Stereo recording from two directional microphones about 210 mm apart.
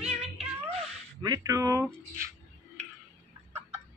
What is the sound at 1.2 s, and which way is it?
Speech, 15° right (ahead or behind).